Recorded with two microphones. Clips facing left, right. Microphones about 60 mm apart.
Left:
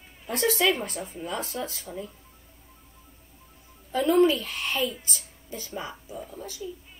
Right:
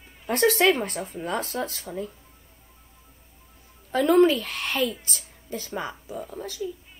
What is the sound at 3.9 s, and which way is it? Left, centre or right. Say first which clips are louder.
Speech: right 2 dB; right.